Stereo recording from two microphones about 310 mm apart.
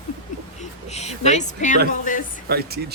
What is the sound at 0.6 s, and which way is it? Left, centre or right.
Speech, left.